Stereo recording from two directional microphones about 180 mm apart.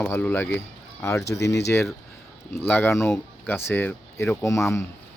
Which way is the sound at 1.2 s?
65° left (ahead or behind).